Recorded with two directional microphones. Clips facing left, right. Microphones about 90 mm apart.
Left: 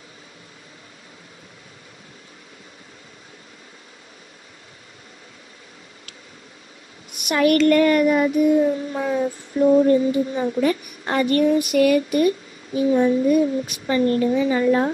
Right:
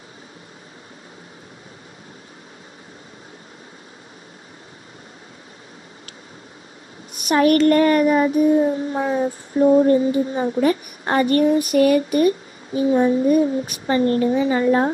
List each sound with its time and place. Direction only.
7.2 s child singing: 35° right (ahead or behind)